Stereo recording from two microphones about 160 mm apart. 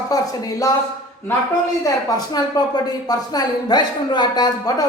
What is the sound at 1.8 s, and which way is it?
Speech, 25° left (ahead or behind).